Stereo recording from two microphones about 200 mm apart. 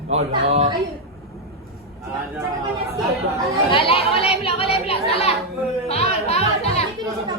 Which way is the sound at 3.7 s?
25° left (ahead or behind).